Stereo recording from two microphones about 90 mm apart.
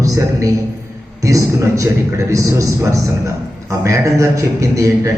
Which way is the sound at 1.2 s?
35° right (ahead or behind).